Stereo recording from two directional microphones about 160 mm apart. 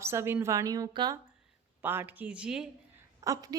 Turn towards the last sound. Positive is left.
turn(degrees=-20)  # may be behind; listen again after turning